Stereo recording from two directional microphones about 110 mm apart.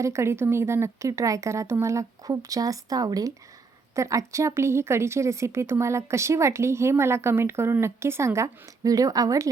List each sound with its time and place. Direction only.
0.0 s speech: 25° right (ahead or behind)